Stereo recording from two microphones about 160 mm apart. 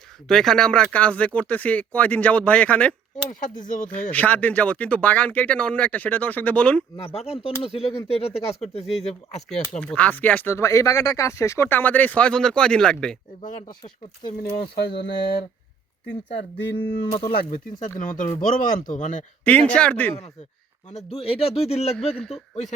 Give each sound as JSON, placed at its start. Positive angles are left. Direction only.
{"t": 0.3, "sound": "speech", "side_deg": 5}
{"t": 3.4, "sound": "speech", "side_deg": 55}
{"t": 4.1, "sound": "speech", "side_deg": 10}
{"t": 6.9, "sound": "speech", "side_deg": 40}
{"t": 9.8, "sound": "speech", "side_deg": 10}
{"t": 13.6, "sound": "speech", "side_deg": 30}
{"t": 14.6, "sound": "speech", "side_deg": 90}
{"t": 17.1, "sound": "speech", "side_deg": 40}
{"t": 17.3, "sound": "speech", "side_deg": 60}
{"t": 19.5, "sound": "speech", "side_deg": 10}
{"t": 20.9, "sound": "speech", "side_deg": 40}